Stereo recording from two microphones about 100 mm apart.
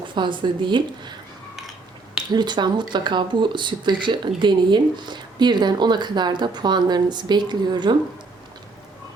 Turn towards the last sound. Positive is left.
turn(degrees=-50)  # may be behind; listen again after turning